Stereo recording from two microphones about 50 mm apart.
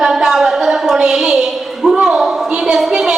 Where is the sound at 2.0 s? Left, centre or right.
Centre.